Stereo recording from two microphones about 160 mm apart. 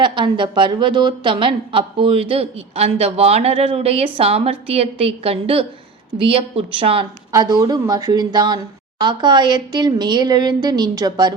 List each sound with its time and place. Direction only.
0.0 s a woman's voice: 30° right (ahead or behind)
7.3 s speech: 25° right (ahead or behind)